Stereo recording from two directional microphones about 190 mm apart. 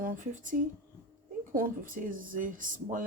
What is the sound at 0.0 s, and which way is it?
Speech, 45° right (ahead or behind).